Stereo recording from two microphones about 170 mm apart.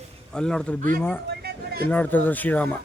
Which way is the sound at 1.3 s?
70° right (ahead or behind).